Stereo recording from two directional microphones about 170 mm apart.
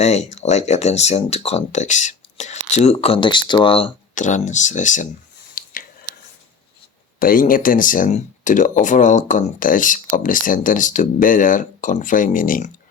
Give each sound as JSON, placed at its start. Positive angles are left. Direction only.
{"t": 0.0, "sound": "speech", "side_deg": 40}
{"t": 4.1, "sound": "speech", "side_deg": 45}
{"t": 5.6, "sound": "a sound", "side_deg": 55}
{"t": 7.2, "sound": "speech", "side_deg": 55}